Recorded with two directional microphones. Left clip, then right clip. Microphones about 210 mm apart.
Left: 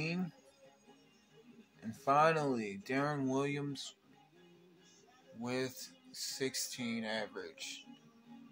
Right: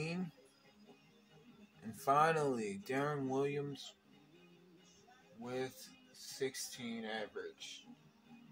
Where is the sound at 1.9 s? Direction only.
15° left (ahead or behind).